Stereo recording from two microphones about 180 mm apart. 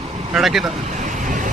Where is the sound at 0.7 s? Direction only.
40° right (ahead or behind).